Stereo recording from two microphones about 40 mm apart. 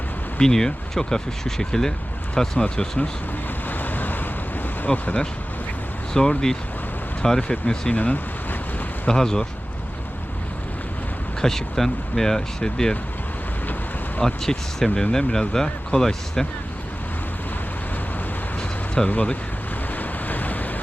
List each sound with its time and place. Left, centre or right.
0.3 s speech: centre
3.7 s vehicle: left
4.8 s speech: left
6.1 s speech: centre
7.4 s speech: left
7.9 s a sound: left
9.0 s speech: centre
11.3 s speech: centre
14.4 s speech: centre
19.0 s speech: left
20.0 s waves: left